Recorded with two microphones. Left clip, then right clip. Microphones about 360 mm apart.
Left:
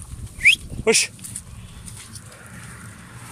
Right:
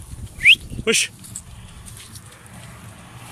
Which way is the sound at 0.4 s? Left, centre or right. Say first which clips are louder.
Right 3 dB; centre.